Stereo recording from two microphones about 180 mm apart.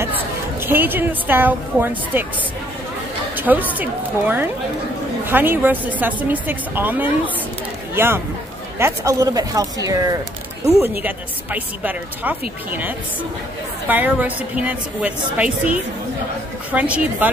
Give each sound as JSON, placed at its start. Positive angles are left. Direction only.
{"t": 0.0, "sound": "a woman's voice", "side_deg": -10}
{"t": 3.3, "sound": "a woman's voice", "side_deg": -10}